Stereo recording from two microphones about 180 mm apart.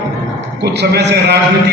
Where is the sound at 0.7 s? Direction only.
70° right (ahead or behind).